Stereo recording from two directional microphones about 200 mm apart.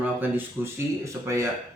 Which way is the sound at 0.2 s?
10° right (ahead or behind).